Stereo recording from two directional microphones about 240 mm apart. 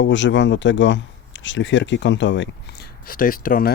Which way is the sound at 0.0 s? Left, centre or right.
Left.